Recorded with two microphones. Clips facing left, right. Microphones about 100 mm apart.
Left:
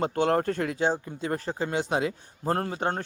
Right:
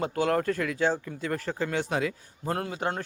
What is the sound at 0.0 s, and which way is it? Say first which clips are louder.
A man's voice: left 2 dB; 35° left (ahead or behind).